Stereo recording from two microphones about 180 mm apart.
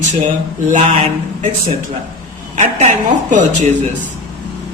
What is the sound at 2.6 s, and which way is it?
Speech, 40° right (ahead or behind).